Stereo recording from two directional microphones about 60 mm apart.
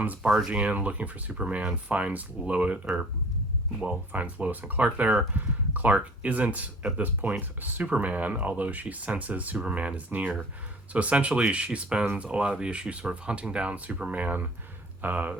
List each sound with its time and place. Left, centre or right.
0.2 s speech: centre
0.5 s speech: right
3.8 s speech: right